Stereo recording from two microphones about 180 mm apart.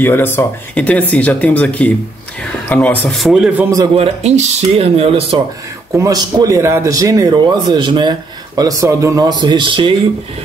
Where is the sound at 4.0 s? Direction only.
35° right (ahead or behind).